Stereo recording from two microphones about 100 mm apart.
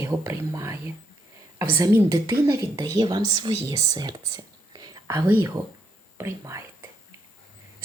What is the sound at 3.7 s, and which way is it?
Whispering, 35° right (ahead or behind).